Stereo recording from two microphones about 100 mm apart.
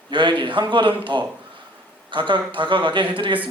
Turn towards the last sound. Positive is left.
turn(degrees=-55)  # may be behind; listen again after turning